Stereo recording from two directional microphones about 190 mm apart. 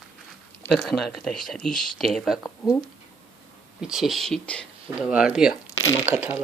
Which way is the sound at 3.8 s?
5° right (ahead or behind).